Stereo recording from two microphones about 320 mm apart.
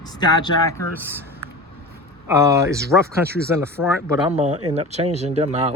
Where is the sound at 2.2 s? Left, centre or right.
Centre.